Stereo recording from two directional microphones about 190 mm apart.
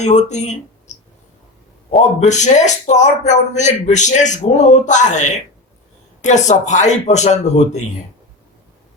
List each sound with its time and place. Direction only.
0.0 s speech: 40° left (ahead or behind)